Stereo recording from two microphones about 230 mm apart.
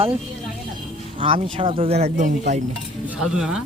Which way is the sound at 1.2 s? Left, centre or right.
Right.